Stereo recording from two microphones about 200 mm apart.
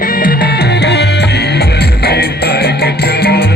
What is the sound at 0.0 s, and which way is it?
Music, 45° left (ahead or behind).